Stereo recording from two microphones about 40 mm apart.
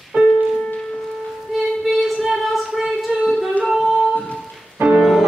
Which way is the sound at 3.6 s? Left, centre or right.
Centre.